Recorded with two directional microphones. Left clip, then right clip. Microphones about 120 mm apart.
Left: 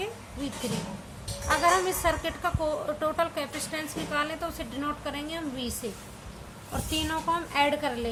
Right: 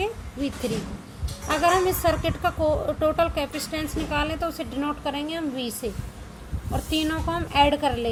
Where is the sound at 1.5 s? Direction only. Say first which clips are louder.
Right 3 dB; 30° right (ahead or behind).